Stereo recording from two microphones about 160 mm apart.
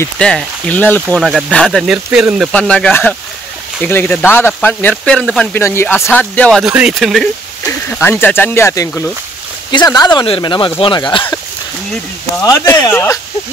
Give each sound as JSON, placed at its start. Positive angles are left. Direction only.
{"t": 0.0, "sound": "speech", "side_deg": 5}
{"t": 2.5, "sound": "speech", "side_deg": 5}
{"t": 6.6, "sound": "speech", "side_deg": -5}
{"t": 8.0, "sound": "speech", "side_deg": 15}
{"t": 12.4, "sound": "speech", "side_deg": 25}